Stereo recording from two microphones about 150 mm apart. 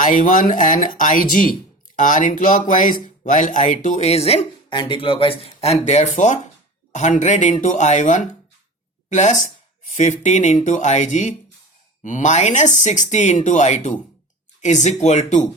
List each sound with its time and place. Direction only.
0.0 s speech: 65° left (ahead or behind)